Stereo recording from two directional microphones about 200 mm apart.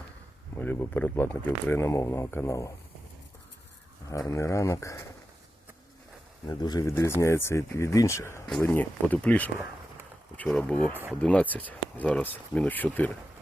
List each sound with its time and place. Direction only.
0.5 s speech: 10° left (ahead or behind)
4.3 s speech: 15° left (ahead or behind)
6.5 s speech: 20° left (ahead or behind)